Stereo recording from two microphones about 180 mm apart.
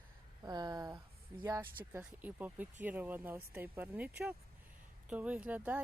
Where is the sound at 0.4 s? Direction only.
20° right (ahead or behind).